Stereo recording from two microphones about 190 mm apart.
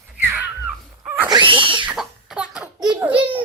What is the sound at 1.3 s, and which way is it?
Cat, 25° right (ahead or behind).